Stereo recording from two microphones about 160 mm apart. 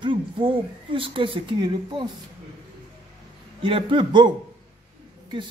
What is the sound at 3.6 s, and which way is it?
Speech, 35° right (ahead or behind).